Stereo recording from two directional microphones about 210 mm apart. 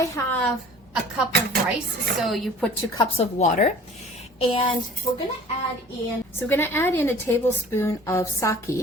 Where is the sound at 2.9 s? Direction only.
25° left (ahead or behind).